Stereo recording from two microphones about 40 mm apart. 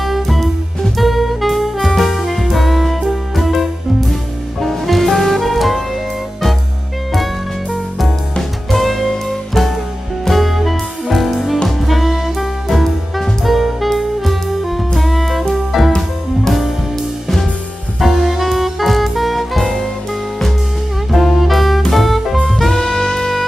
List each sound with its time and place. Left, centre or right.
0.0 s music: centre
0.9 s saxophone: centre
7.7 s music: centre
18.0 s music: centre
21.1 s saxophone: centre
21.8 s music: centre
22.7 s saxophone: centre